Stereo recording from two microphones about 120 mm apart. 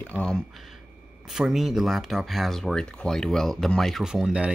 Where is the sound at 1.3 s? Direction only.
5° right (ahead or behind).